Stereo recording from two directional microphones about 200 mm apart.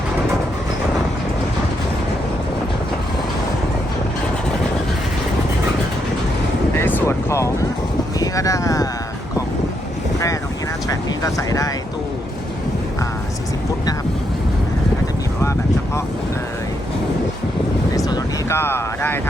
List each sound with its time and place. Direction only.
6.7 s vehicle: 10° left (ahead or behind)
8.2 s a sound: 15° left (ahead or behind)
10.8 s vehicle: 15° left (ahead or behind)
17.9 s vehicle: 15° left (ahead or behind)